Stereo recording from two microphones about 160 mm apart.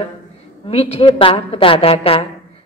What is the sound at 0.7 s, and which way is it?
A woman's voice, 40° left (ahead or behind).